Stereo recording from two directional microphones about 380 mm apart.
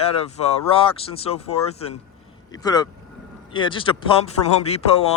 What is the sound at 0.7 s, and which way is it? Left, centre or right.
Speech, centre.